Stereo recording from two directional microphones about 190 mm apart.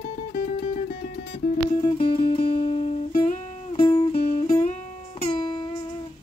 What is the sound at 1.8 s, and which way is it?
Music, 25° left (ahead or behind).